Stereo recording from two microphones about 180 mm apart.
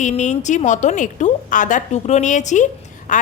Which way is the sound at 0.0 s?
40° left (ahead or behind).